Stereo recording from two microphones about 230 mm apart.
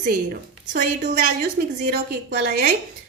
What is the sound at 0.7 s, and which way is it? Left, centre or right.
A woman's voice, right.